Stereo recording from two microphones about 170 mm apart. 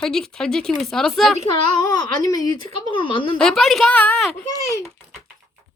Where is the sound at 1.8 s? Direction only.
20° left (ahead or behind).